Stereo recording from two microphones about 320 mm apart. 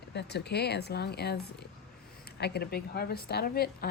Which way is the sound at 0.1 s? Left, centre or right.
Left.